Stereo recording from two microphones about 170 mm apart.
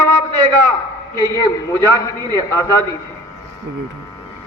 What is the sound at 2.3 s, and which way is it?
Speech, 20° left (ahead or behind).